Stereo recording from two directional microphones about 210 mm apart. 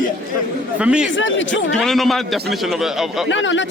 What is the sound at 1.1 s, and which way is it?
Speech, 60° left (ahead or behind).